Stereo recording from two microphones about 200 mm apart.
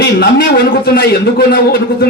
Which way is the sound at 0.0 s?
50° left (ahead or behind).